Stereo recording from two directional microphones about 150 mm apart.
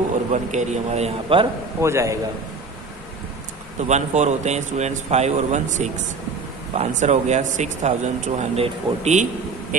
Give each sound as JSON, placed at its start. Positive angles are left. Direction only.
{"t": 0.3, "sound": "a man's voice", "side_deg": -50}
{"t": 1.8, "sound": "a man's voice", "side_deg": -20}
{"t": 3.8, "sound": "a man's voice", "side_deg": -50}